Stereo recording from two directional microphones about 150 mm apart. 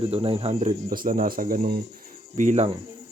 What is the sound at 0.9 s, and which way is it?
Speech, 70° right (ahead or behind).